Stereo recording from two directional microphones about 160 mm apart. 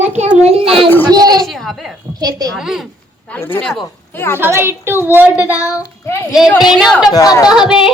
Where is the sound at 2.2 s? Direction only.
25° right (ahead or behind).